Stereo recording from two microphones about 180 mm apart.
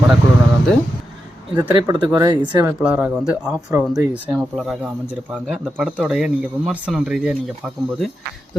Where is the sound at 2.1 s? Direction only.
20° right (ahead or behind).